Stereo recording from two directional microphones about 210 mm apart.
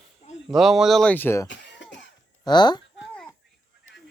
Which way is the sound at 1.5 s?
55° left (ahead or behind).